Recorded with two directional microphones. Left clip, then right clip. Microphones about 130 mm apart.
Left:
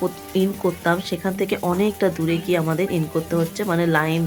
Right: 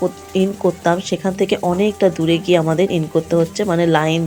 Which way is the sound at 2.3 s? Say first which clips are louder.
Right 6 dB; 25° right (ahead or behind).